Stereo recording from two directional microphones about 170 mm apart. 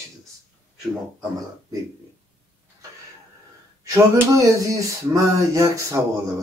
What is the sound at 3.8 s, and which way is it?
Speech, 20° right (ahead or behind).